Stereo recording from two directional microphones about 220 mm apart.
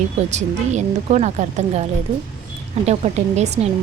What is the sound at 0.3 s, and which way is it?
A woman's voice, 30° right (ahead or behind).